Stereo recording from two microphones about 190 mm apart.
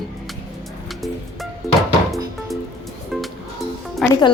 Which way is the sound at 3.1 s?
Centre (ahead or behind).